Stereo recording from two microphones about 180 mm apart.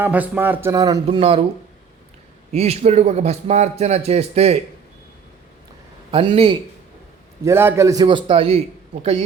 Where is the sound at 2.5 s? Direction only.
35° right (ahead or behind).